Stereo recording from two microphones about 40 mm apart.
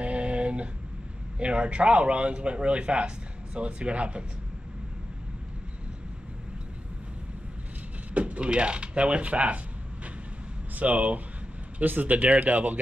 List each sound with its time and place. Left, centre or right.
0.0 s a sound: right
1.4 s a man's voice: right
8.1 s speech: right
10.8 s speech: right
11.8 s speech: right